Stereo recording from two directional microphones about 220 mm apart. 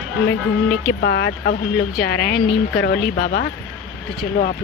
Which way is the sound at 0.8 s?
50° left (ahead or behind).